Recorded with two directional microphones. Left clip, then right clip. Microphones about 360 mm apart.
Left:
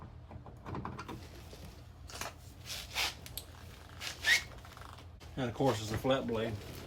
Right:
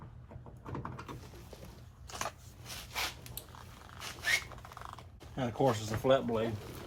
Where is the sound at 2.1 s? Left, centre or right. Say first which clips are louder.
Right 4 dB; centre.